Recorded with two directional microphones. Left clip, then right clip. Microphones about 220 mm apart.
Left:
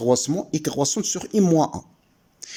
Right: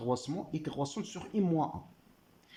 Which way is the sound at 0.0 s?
35° left (ahead or behind).